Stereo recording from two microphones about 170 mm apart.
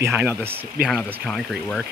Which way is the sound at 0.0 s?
15° right (ahead or behind).